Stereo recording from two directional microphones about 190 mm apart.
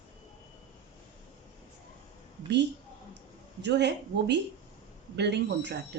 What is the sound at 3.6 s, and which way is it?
Speech, 65° right (ahead or behind).